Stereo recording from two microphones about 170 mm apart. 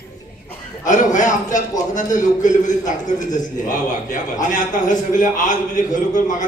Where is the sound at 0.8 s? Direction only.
50° left (ahead or behind).